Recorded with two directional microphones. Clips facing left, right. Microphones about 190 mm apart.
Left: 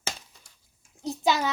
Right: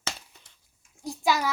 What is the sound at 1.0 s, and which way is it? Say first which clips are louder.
Speech: left 1 dB; 20° left (ahead or behind).